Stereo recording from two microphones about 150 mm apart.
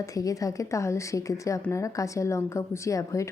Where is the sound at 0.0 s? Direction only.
25° left (ahead or behind).